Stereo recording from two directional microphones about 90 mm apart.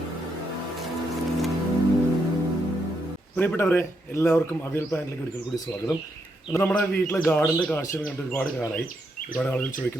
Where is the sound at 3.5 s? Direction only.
25° left (ahead or behind).